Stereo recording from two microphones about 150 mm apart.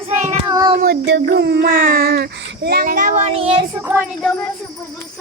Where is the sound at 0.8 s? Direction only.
90° right; by 3.2 s 65° right (ahead or behind).